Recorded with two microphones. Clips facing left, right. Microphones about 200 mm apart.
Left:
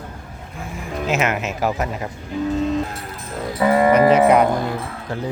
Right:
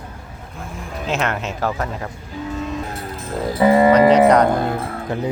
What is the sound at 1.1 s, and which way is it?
Speech, 5° left (ahead or behind).